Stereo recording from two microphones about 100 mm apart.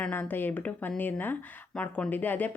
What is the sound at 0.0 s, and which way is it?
Speech, 20° left (ahead or behind).